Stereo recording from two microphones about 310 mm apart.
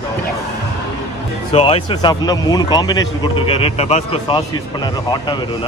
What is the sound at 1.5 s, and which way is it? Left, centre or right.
A man's voice, centre.